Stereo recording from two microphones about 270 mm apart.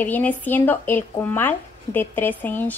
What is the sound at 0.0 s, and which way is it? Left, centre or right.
A woman's voice, centre.